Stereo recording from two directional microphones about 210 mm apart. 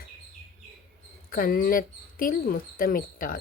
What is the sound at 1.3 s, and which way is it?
A woman's voice, 45° left (ahead or behind).